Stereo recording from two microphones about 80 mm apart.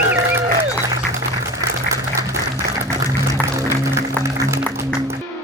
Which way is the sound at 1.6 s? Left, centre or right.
Right.